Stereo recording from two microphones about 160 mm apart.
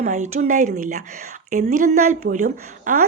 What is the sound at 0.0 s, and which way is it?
A woman's voice, 50° right (ahead or behind).